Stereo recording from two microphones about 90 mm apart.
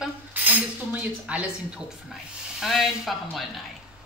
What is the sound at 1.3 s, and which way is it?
Speech, 15° right (ahead or behind).